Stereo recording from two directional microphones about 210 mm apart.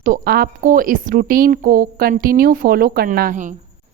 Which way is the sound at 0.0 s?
40° right (ahead or behind).